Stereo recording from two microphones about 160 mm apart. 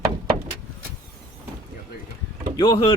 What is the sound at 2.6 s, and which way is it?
Speech, 35° left (ahead or behind).